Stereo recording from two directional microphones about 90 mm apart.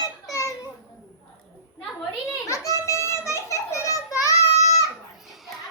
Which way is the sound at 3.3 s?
35° left (ahead or behind).